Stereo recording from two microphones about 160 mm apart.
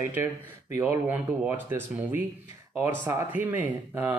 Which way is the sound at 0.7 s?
10° right (ahead or behind).